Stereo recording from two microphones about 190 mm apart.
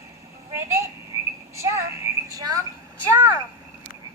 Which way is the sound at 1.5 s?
15° right (ahead or behind).